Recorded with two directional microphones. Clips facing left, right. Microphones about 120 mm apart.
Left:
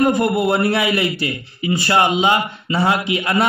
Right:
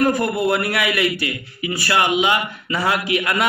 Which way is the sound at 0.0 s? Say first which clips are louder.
Left 2 dB; 25° left (ahead or behind).